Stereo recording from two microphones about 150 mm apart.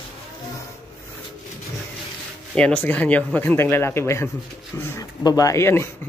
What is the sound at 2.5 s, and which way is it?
Speech, 10° left (ahead or behind).